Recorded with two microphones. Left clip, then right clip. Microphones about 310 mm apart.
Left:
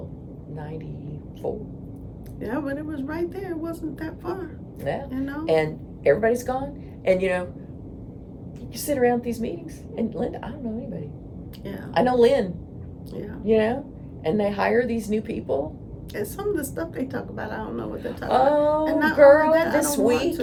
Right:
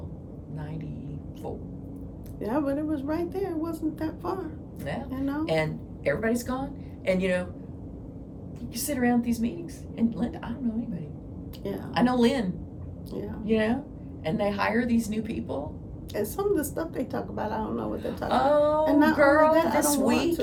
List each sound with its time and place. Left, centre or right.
0.5 s a sound: centre
2.4 s a woman's voice: centre
4.8 s a woman's voice: centre
5.0 s a woman's voice: centre
5.5 s a woman's voice: centre
8.7 s a woman's voice: centre
13.1 s a woman's voice: centre
13.4 s a woman's voice: centre
16.1 s a woman's voice: centre
18.3 s a woman's voice: centre
18.9 s a woman's voice: centre
19.1 s a woman's voice: centre
19.5 s a woman's voice: centre
19.9 s a woman's voice: centre